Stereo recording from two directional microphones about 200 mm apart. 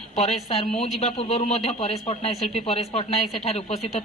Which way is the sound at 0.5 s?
30° left (ahead or behind).